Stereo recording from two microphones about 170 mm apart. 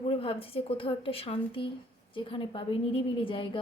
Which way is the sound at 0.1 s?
35° left (ahead or behind).